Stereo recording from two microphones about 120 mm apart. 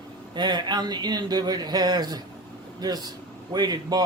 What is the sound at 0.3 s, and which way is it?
Speech, 35° right (ahead or behind).